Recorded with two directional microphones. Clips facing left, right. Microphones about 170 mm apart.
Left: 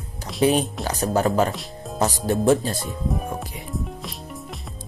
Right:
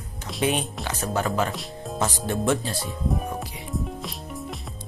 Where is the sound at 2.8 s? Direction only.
Centre (ahead or behind).